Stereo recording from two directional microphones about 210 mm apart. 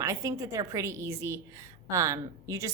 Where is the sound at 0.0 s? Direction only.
15° right (ahead or behind).